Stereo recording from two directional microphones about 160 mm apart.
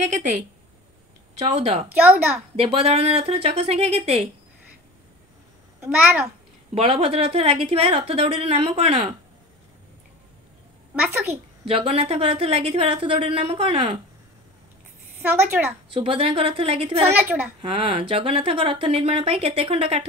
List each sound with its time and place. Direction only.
1.4 s speech: 40° right (ahead or behind)
1.9 s a child's voice: 10° right (ahead or behind)
2.5 s speech: 40° right (ahead or behind)
5.8 s a child's voice: 10° right (ahead or behind)
6.7 s speech: 35° right (ahead or behind)
11.0 s a child's voice: 10° right (ahead or behind)
11.6 s speech: 35° right (ahead or behind)
15.2 s a child's voice: 10° right (ahead or behind)
15.9 s speech: 35° right (ahead or behind)
17.0 s a child's voice: 10° right (ahead or behind)
17.6 s speech: 35° right (ahead or behind)